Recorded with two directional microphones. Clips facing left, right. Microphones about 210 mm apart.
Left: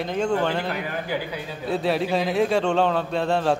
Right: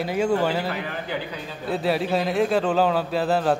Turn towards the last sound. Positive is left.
turn(degrees=0)  # may be behind; listen again after turning